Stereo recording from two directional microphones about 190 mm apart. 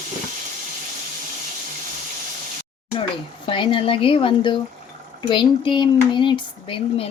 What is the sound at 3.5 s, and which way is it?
Speech, 25° left (ahead or behind).